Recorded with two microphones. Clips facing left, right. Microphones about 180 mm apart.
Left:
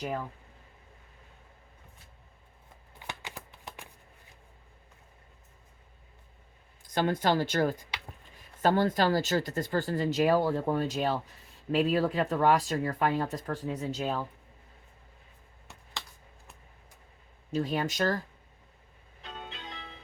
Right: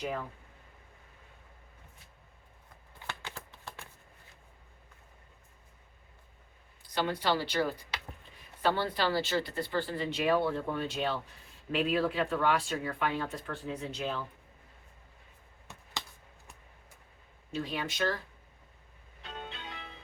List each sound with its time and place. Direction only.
3.1 s a sound: 15° left (ahead or behind)
6.8 s speech: 50° left (ahead or behind)
17.5 s speech: 40° left (ahead or behind)